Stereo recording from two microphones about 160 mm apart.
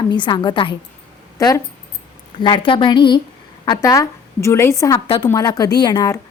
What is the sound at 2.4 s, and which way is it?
A woman's voice, 30° left (ahead or behind).